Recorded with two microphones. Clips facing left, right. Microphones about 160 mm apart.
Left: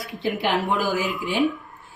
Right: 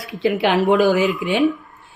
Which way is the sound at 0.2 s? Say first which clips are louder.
Right 7 dB; 85° right.